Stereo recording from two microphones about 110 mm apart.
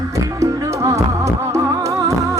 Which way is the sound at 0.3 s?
30° right (ahead or behind).